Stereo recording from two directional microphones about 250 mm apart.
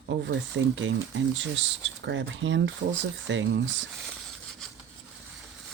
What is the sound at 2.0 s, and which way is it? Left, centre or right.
Speech, right.